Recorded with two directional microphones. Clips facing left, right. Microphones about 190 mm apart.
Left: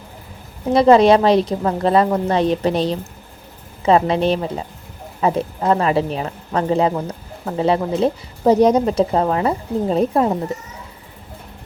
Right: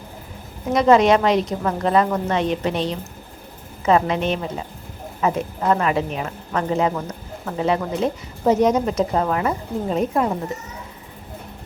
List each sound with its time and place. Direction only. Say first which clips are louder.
0.7 s a woman's voice: left 4 dB; 30° left (ahead or behind)